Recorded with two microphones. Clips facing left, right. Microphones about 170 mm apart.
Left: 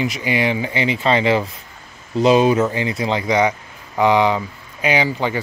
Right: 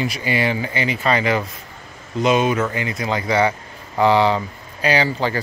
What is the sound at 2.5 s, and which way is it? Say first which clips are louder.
Speech: left 4 dB; 20° left (ahead or behind).